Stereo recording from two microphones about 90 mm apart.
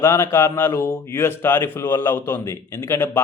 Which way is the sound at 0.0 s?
30° left (ahead or behind).